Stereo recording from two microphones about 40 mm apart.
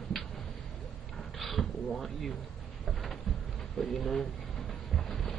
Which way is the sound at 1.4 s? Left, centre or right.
Centre.